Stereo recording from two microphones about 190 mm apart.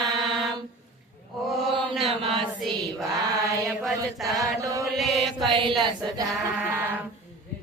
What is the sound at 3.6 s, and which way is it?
Mantra, centre (ahead or behind).